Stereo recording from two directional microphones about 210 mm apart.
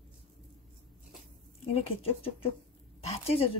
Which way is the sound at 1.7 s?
25° left (ahead or behind).